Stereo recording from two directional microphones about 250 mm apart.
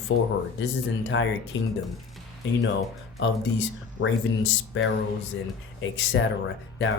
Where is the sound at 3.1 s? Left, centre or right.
Left.